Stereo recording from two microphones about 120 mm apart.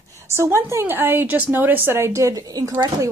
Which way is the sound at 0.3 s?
20° right (ahead or behind).